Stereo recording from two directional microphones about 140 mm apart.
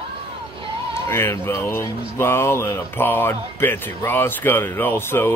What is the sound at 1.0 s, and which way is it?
Speech, 15° left (ahead or behind).